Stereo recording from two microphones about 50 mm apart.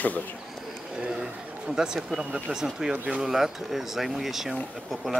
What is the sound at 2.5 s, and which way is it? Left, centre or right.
Speech, centre.